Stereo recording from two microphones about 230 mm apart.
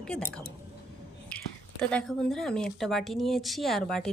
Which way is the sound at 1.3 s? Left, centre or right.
Centre.